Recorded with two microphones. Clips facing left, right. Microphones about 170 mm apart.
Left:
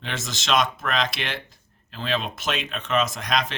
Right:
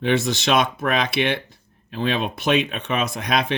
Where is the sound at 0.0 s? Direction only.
60° right (ahead or behind).